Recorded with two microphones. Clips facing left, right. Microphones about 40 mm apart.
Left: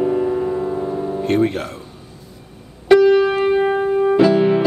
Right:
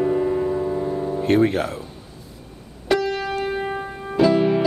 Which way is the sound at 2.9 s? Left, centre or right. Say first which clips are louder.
Left 12 dB; centre.